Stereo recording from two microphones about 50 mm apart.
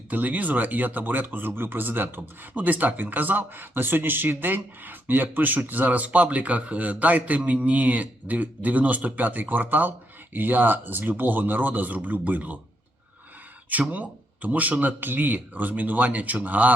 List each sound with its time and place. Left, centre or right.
0.1 s speech: right
13.9 s speech: right